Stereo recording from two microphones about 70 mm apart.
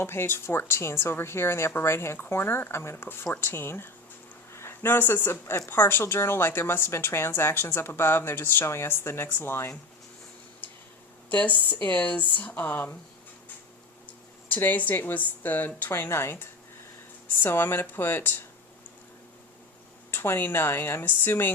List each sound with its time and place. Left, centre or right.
0.0 s speech: left
11.3 s speech: left
14.5 s speech: left
15.9 s speech: left
20.1 s speech: left